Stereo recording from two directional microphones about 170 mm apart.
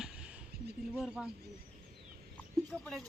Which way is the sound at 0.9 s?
5° right (ahead or behind).